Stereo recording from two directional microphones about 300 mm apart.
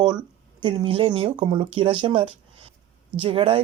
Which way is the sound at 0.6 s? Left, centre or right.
Centre.